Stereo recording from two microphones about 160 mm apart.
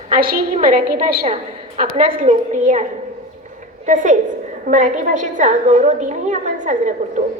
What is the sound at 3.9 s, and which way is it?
A woman's voice, 55° right (ahead or behind).